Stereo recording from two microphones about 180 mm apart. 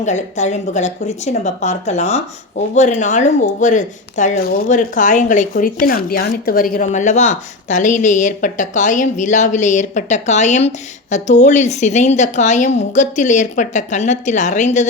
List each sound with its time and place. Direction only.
0.0 s speech: 40° left (ahead or behind)